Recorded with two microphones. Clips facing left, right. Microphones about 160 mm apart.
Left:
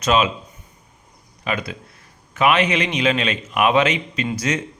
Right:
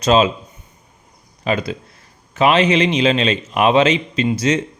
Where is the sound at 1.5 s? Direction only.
30° right (ahead or behind).